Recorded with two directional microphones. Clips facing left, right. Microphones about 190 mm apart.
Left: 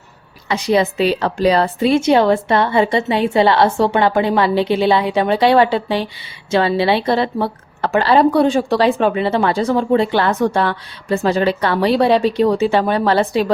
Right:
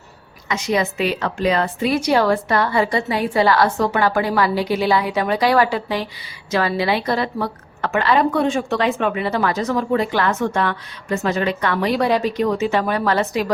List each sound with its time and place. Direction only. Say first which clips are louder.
0.4 s a woman's voice: left 5 dB; 35° left (ahead or behind)